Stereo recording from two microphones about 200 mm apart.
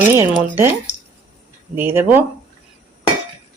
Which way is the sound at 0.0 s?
10° right (ahead or behind).